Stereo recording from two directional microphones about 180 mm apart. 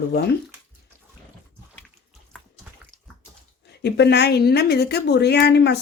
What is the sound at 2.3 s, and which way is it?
Bathtub, 5° left (ahead or behind).